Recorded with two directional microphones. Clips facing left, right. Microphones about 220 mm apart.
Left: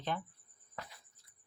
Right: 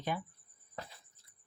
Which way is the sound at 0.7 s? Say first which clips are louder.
Right 2 dB; 30° right (ahead or behind).